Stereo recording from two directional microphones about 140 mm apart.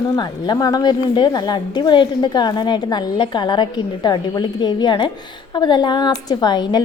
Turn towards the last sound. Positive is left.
turn(degrees=30)  # may be behind; listen again after turning